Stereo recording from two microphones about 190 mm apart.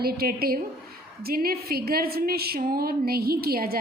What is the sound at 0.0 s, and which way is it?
A woman's voice, 55° right (ahead or behind).